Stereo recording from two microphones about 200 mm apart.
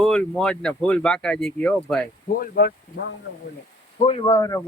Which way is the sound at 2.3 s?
45° left (ahead or behind).